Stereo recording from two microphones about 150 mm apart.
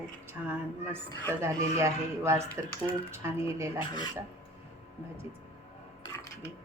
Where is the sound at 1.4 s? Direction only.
20° right (ahead or behind).